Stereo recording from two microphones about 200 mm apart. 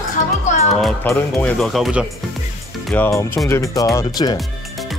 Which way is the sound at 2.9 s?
10° left (ahead or behind).